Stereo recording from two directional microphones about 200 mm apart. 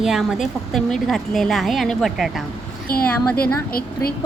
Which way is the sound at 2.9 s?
50° left (ahead or behind).